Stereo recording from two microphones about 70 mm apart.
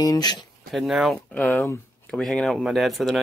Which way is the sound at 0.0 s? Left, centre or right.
Left.